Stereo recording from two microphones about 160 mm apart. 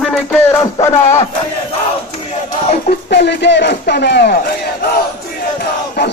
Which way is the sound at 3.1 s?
90° left.